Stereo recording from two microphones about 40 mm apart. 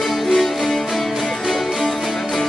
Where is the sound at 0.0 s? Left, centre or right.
Centre.